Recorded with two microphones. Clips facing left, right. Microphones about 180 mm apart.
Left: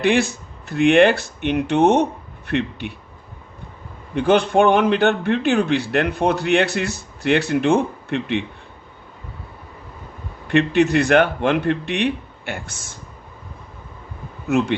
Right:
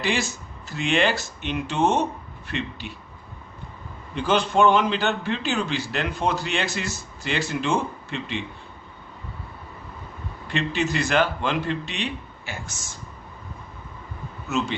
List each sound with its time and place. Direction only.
0.0 s a man's voice: 60° left (ahead or behind)
4.1 s a man's voice: 60° left (ahead or behind)
10.5 s a man's voice: 60° left (ahead or behind)
14.4 s a man's voice: 60° left (ahead or behind)